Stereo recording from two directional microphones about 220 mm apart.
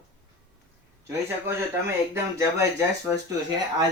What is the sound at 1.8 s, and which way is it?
Speech, 15° right (ahead or behind).